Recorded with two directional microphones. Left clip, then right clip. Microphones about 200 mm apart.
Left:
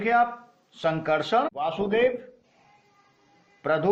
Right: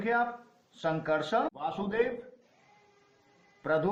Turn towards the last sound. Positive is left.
turn(degrees=45)  # may be behind; listen again after turning